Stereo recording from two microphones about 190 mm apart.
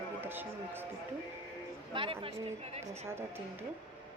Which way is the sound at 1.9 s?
30° right (ahead or behind).